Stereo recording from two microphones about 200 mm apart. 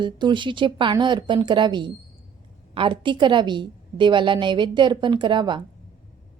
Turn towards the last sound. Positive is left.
turn(degrees=-25)  # may be behind; listen again after turning